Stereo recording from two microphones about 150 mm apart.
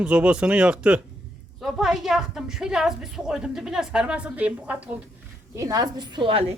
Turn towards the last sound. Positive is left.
turn(degrees=-40)  # may be behind; listen again after turning